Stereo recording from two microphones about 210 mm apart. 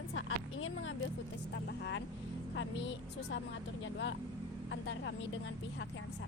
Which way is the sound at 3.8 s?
60° left (ahead or behind).